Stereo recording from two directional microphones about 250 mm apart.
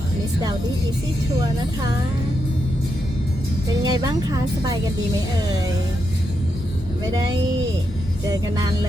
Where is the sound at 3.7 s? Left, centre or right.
Centre.